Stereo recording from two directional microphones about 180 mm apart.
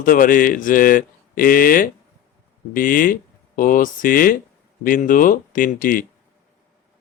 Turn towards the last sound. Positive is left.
turn(degrees=50)  # may be behind; listen again after turning